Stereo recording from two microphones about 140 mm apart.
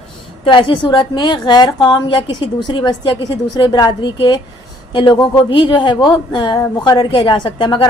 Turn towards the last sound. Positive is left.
turn(degrees=35)  # may be behind; listen again after turning